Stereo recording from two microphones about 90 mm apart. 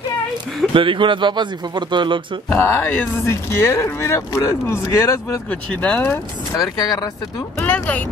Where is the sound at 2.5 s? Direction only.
25° left (ahead or behind).